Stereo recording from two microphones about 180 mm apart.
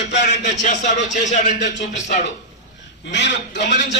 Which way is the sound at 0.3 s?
40° left (ahead or behind).